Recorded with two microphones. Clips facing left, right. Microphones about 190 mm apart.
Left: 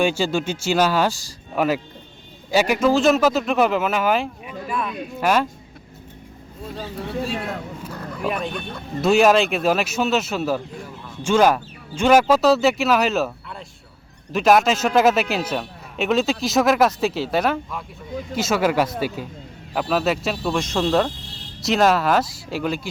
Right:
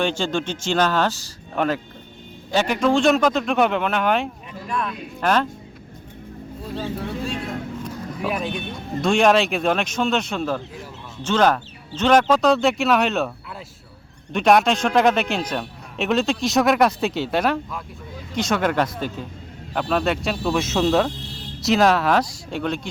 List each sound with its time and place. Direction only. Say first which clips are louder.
0.0 s a man's voice: left 2 dB; 10° left (ahead or behind)
7.9 s a sound: right 1 dB; 60° left (ahead or behind)
8.2 s a man's voice: even; centre (ahead or behind)